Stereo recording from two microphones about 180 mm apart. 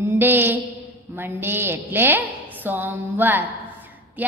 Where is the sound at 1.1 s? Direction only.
10° right (ahead or behind).